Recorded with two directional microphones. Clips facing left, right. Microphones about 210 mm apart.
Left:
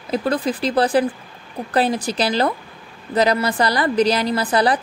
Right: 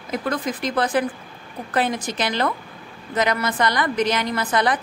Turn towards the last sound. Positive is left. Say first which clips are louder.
# left 3 dB
turn(degrees=35)  # may be behind; listen again after turning